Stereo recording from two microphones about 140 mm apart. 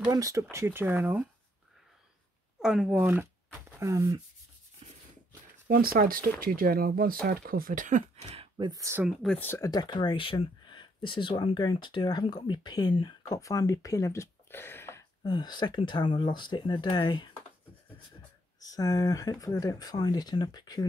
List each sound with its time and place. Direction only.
0.1 s speech: 20° right (ahead or behind)
2.6 s speech: 5° right (ahead or behind)
3.8 s speech: 25° right (ahead or behind)
5.7 s speech: 90° right; by 8.3 s 65° right (ahead or behind)
8.3 s a sound: 35° right (ahead or behind)
8.7 s speech: 20° right (ahead or behind)
9.3 s speech: 15° left (ahead or behind)
9.7 s speech: 30° left (ahead or behind)
15.2 s speech: 30° left (ahead or behind)
18.6 s speech: 25° left (ahead or behind)